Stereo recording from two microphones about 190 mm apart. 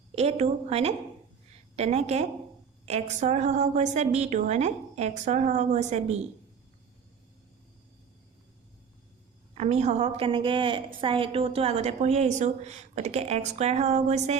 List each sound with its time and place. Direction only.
0.2 s a woman's voice: 35° right (ahead or behind)
9.6 s a woman's voice: 35° right (ahead or behind)